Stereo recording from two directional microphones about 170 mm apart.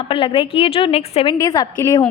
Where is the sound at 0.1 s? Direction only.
30° left (ahead or behind).